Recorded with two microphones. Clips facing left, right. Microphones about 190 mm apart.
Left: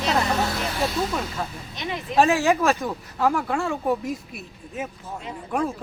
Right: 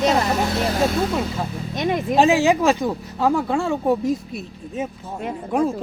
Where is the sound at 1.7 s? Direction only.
50° right (ahead or behind).